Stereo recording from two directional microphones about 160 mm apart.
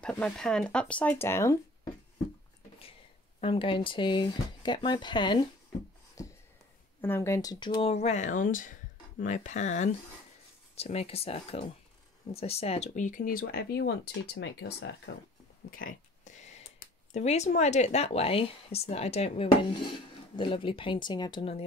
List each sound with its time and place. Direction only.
0.0 s speech: 5° left (ahead or behind)
3.3 s speech: 35° left (ahead or behind)
6.2 s a sound: 20° left (ahead or behind)
7.0 s speech: 15° left (ahead or behind); by 15.0 s 90° left
15.7 s a sound: 60° left (ahead or behind)
17.1 s speech: 45° left (ahead or behind)